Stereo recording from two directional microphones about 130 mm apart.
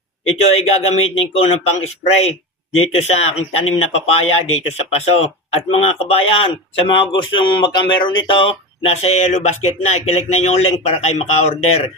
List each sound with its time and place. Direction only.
0.3 s a man's voice: 50° left (ahead or behind)